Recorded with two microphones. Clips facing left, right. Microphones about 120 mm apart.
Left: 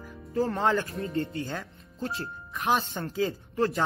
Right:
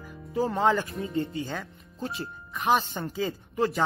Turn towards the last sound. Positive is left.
turn(degrees=0)  # may be behind; listen again after turning